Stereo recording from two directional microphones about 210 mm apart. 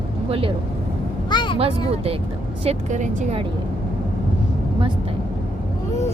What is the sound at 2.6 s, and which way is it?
Speech, 35° right (ahead or behind).